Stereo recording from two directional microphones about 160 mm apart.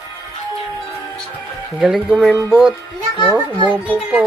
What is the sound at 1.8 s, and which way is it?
Speech, 5° right (ahead or behind).